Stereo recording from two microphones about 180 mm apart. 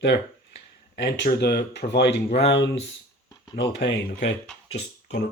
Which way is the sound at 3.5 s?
70° left (ahead or behind).